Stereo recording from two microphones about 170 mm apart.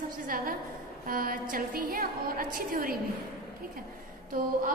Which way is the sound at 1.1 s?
55° right (ahead or behind).